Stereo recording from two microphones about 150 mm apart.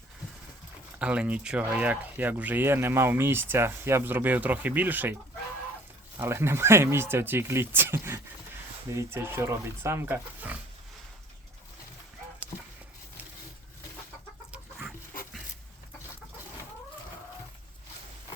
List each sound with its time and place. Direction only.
0.9 s speech: 10° right (ahead or behind)
6.1 s speech: 15° right (ahead or behind)
14.5 s chicken: 10° right (ahead or behind)